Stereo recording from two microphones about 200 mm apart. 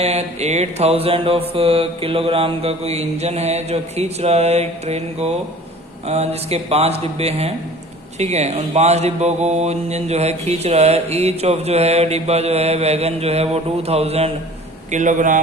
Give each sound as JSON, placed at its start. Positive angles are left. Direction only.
{"t": 0.0, "sound": "speech", "side_deg": -30}